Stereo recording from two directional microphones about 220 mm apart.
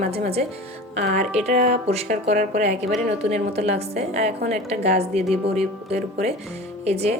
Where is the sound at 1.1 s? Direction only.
30° right (ahead or behind).